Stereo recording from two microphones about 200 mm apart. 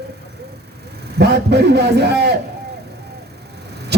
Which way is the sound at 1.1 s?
55° right (ahead or behind).